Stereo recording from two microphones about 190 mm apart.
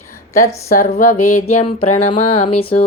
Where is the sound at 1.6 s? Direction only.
35° left (ahead or behind).